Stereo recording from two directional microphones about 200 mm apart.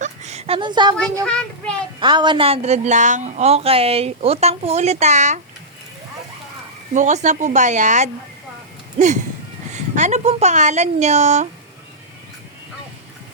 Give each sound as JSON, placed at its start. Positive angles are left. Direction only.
{"t": 0.0, "sound": "a sound", "side_deg": -35}
{"t": 1.2, "sound": "a child's voice", "side_deg": 5}
{"t": 2.0, "sound": "a woman's voice", "side_deg": -25}
{"t": 6.9, "sound": "a woman's voice", "side_deg": -35}